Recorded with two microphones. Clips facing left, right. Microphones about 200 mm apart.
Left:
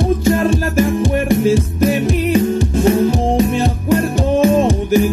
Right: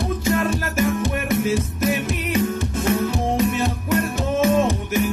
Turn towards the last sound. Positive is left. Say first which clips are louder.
# left 6 dB
turn(degrees=30)  # may be behind; listen again after turning